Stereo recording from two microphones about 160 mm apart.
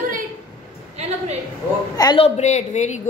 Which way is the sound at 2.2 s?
45° left (ahead or behind).